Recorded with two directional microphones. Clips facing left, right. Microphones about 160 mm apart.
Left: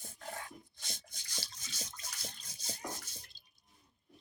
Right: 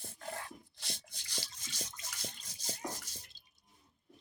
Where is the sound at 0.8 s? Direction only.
85° right.